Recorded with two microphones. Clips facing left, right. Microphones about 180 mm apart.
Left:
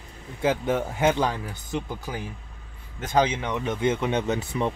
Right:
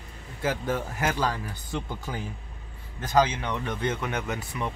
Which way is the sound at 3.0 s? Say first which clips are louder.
Left 1 dB; 25° left (ahead or behind).